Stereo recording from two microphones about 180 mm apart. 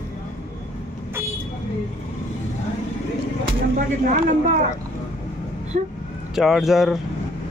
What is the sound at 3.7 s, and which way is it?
Speech, 50° right (ahead or behind).